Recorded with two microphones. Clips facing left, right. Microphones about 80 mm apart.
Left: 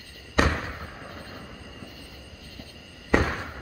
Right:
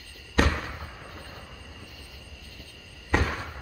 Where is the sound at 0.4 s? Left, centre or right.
Centre.